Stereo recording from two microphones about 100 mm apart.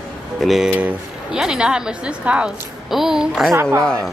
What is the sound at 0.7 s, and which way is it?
A woman's voice, 15° right (ahead or behind).